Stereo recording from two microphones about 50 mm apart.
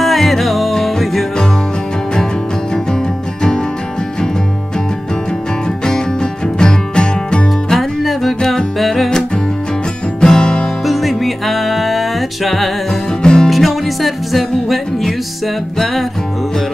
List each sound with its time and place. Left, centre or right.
0.0 s music: centre
5.9 s music: centre
7.7 s music: centre
10.2 s music: centre
10.9 s music: centre
13.2 s music: centre
13.5 s music: centre